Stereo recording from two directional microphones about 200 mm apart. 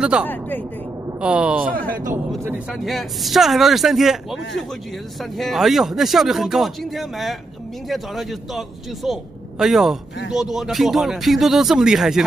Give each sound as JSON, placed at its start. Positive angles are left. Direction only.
{"t": 0.0, "sound": "speech", "side_deg": -5}
{"t": 0.3, "sound": "speech", "side_deg": 10}
{"t": 1.2, "sound": "speech", "side_deg": -5}
{"t": 1.7, "sound": "a man's voice", "side_deg": -45}
{"t": 2.7, "sound": "speech", "side_deg": 0}